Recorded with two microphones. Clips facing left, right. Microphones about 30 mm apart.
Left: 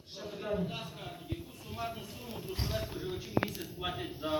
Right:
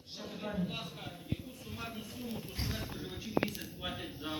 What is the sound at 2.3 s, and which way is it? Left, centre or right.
Music, left.